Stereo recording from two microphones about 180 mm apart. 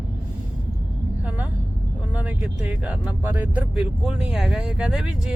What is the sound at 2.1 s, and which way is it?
Speech, 10° right (ahead or behind).